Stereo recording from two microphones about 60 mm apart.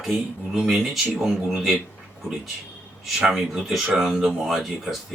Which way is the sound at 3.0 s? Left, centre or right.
Centre.